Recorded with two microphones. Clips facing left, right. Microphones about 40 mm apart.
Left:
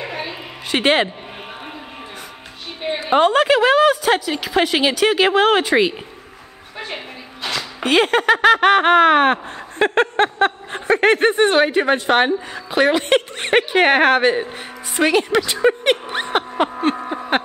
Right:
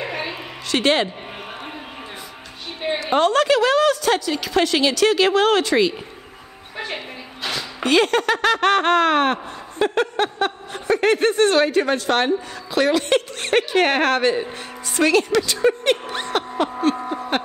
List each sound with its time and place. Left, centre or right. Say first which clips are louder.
0.7 s speech: left 2 dB; left
3.0 s speech: left 3 dB; centre
7.8 s speech: left 2 dB; centre
9.8 s speech: left 4 dB; left
16.9 s a sound: left 3 dB; centre